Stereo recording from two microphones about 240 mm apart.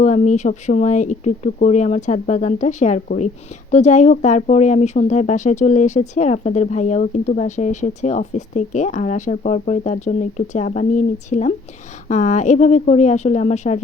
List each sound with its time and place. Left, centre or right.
0.0 s speech: left